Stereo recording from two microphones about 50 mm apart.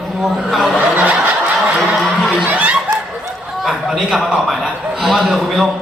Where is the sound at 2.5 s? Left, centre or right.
Right.